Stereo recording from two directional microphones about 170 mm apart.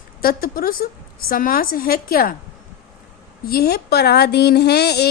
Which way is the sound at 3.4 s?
65° left (ahead or behind).